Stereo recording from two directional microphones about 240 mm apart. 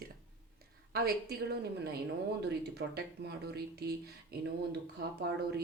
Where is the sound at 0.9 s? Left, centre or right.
Right.